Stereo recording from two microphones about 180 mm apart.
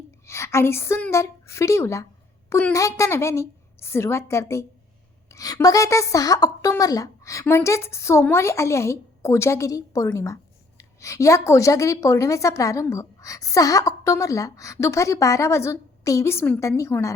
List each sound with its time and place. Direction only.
0.3 s a woman's voice: 15° left (ahead or behind)